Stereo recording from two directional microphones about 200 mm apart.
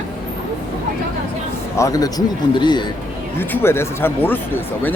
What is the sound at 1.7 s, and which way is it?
Speech, 15° left (ahead or behind).